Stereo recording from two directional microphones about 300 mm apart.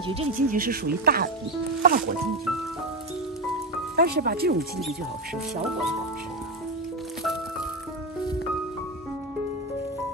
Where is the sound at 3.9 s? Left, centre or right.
Right.